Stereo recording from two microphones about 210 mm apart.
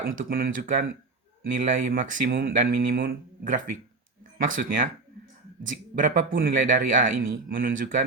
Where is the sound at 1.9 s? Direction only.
45° right (ahead or behind).